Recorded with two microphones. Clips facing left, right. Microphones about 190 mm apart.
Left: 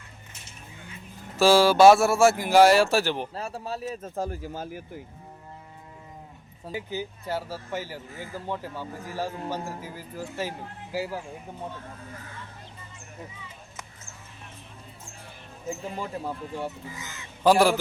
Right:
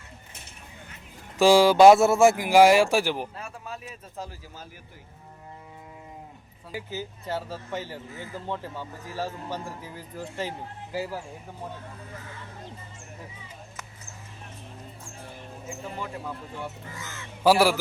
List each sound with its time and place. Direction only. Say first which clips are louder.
1.4 s speech: right 1 dB; 15° right (ahead or behind)
3.3 s speech: left 6 dB; 35° left (ahead or behind); by 4.8 s 50° left (ahead or behind)
6.7 s speech: left 2 dB; 15° left (ahead or behind)
16.0 s speech: left 3 dB; 35° left (ahead or behind)
17.0 s speech: right 1 dB; 15° left (ahead or behind)
17.4 s speech: left 1 dB; 10° right (ahead or behind)